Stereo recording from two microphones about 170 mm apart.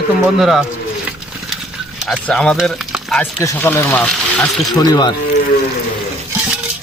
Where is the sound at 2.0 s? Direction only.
Centre (ahead or behind).